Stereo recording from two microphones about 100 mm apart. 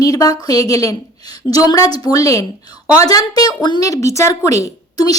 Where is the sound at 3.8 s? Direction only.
35° left (ahead or behind).